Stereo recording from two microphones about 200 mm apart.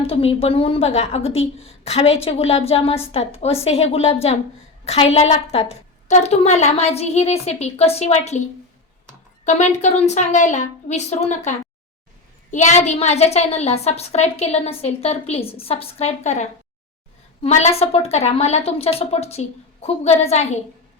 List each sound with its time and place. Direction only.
0.1 s a woman's voice: 30° left (ahead or behind)
9.4 s a woman's voice: 35° left (ahead or behind)